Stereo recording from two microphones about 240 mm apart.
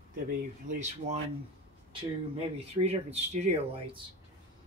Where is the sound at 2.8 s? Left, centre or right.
Right.